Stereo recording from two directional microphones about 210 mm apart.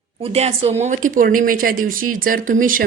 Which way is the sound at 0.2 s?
30° right (ahead or behind).